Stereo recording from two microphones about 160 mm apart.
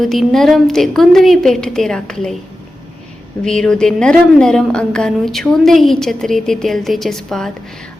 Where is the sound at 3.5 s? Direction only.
5° left (ahead or behind).